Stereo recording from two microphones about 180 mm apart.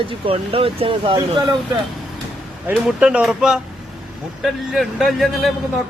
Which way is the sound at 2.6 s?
5° right (ahead or behind).